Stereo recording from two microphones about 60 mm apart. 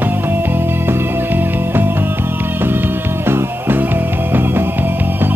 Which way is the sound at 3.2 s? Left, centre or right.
Right.